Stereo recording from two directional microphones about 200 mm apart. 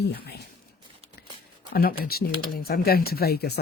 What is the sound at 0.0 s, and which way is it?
Speech, 55° left (ahead or behind).